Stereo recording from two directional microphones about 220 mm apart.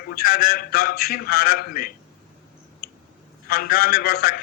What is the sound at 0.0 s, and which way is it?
A man's voice, 45° left (ahead or behind).